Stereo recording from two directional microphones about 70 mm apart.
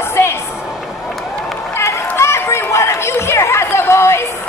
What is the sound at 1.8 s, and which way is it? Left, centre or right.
Run, left.